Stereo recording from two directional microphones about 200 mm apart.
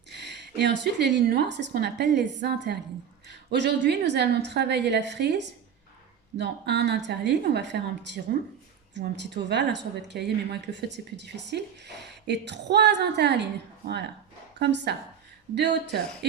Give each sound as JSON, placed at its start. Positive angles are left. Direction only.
{"t": 0.1, "sound": "speech", "side_deg": -55}